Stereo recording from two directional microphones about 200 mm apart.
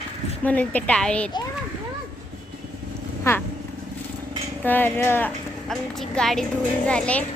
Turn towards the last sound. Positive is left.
turn(degrees=5)  # may be behind; listen again after turning